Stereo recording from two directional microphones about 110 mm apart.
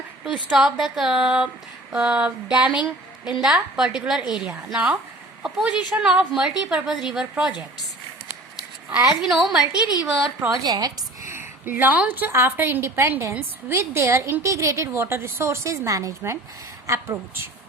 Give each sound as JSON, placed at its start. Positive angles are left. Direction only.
{"t": 0.4, "sound": "a woman's voice", "side_deg": -5}
{"t": 1.9, "sound": "a sound", "side_deg": -10}
{"t": 3.4, "sound": "a woman's voice", "side_deg": -5}
{"t": 4.4, "sound": "a sound", "side_deg": -5}
{"t": 5.4, "sound": "a woman's voice", "side_deg": -5}
{"t": 9.2, "sound": "a woman's voice", "side_deg": -5}
{"t": 10.5, "sound": "a woman's voice", "side_deg": -35}
{"t": 11.3, "sound": "a woman's voice", "side_deg": -20}